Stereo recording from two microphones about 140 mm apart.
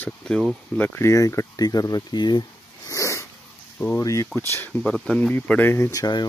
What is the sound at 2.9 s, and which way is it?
Sneeze, 20° left (ahead or behind).